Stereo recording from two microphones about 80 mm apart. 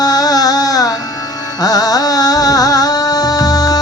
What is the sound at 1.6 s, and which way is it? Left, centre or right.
Music, left.